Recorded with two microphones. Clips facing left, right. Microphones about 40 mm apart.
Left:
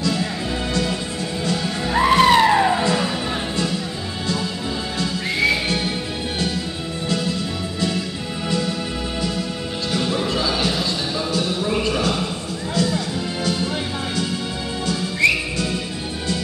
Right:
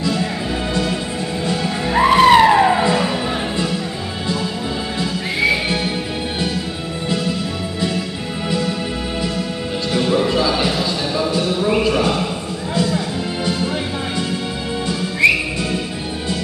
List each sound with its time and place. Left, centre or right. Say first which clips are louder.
1.4 s music: right 2 dB; centre
5.4 s music: right 2 dB; centre
8.5 s music: right 2 dB; centre
9.9 s music: right 6 dB; centre
11.6 s a sound: right 6 dB; centre
14.9 s music: right 3 dB; centre